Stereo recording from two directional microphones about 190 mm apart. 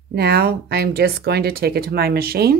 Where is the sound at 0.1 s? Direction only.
55° right (ahead or behind).